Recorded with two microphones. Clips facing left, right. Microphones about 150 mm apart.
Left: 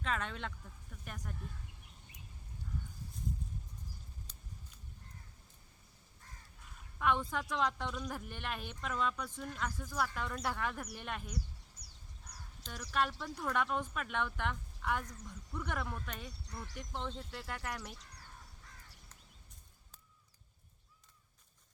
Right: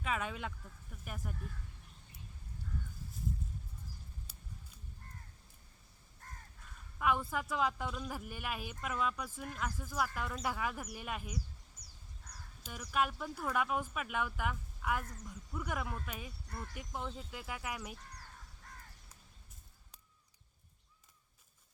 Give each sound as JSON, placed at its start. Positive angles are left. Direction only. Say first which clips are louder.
{"t": 0.0, "sound": "speech", "louder": "right 1 dB", "side_deg": -5}
{"t": 4.3, "sound": "scissors", "louder": "right 1 dB", "side_deg": -10}
{"t": 6.2, "sound": "crow", "louder": "right 5 dB", "side_deg": -50}
{"t": 7.0, "sound": "speech", "louder": "even", "side_deg": -5}
{"t": 12.6, "sound": "speech", "louder": "right 1 dB", "side_deg": -5}